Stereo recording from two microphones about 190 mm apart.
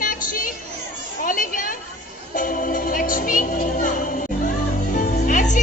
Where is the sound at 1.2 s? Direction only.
45° left (ahead or behind).